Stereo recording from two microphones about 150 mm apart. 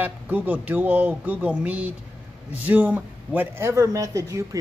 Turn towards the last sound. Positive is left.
turn(degrees=-20)  # may be behind; listen again after turning